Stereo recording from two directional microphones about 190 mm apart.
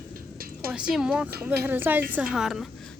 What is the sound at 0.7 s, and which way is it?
A woman's voice, 5° right (ahead or behind).